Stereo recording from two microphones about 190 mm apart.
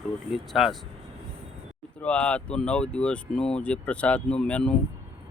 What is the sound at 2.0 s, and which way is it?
Speech, 5° left (ahead or behind).